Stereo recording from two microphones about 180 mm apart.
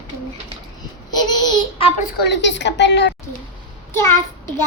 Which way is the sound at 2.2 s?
75° left (ahead or behind).